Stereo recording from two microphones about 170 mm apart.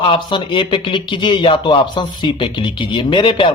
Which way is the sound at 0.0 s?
30° left (ahead or behind).